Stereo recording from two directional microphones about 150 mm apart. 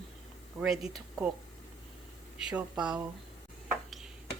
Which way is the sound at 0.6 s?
5° right (ahead or behind).